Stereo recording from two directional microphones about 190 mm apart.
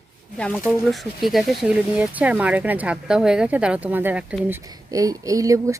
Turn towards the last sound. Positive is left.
turn(degrees=-15)  # may be behind; listen again after turning